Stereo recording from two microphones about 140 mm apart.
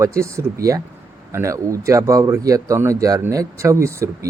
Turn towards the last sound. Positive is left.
turn(degrees=-20)  # may be behind; listen again after turning